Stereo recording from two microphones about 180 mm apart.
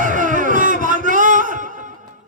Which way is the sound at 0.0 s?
45° right (ahead or behind).